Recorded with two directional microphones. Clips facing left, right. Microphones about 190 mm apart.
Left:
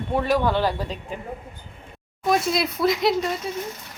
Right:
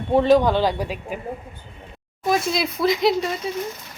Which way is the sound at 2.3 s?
Centre (ahead or behind).